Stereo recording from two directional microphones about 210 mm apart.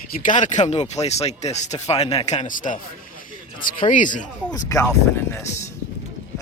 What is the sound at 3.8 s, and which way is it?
Speech, 35° left (ahead or behind).